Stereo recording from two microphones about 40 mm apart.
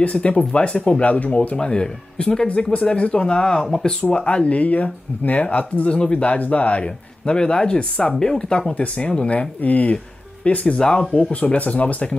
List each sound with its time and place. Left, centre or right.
0.0 s speech: left
1.6 s speech: left
4.2 s speech: left
9.6 s speech: left
10.8 s speech: centre
11.3 s speech: left